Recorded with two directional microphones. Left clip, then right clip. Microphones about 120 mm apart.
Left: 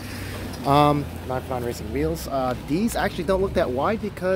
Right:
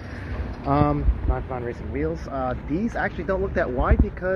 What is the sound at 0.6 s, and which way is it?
Speech, 25° left (ahead or behind).